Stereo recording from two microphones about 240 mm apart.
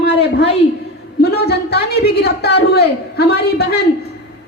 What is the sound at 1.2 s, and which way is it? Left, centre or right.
A woman's voice, left.